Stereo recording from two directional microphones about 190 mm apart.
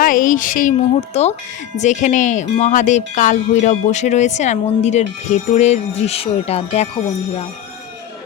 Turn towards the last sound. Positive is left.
turn(degrees=30)  # may be behind; listen again after turning